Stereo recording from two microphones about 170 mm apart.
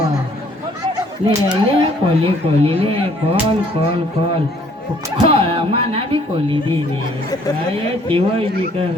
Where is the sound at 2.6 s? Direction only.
35° right (ahead or behind).